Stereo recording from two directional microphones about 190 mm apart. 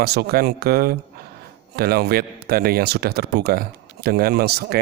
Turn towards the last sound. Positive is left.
turn(degrees=-55)  # may be behind; listen again after turning